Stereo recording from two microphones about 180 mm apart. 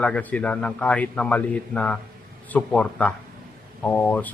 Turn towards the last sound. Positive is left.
turn(degrees=10)  # may be behind; listen again after turning